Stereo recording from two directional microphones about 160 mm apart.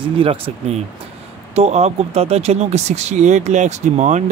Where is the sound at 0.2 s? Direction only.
35° right (ahead or behind).